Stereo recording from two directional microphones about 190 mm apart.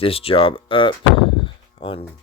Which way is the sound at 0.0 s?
30° left (ahead or behind).